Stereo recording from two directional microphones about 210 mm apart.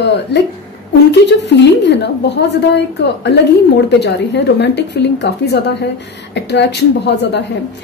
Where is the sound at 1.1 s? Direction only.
55° left (ahead or behind).